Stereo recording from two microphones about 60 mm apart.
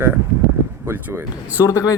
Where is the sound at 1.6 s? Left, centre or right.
Left.